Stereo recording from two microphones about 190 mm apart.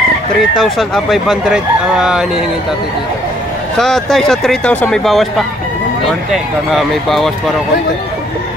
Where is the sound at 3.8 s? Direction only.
Centre (ahead or behind).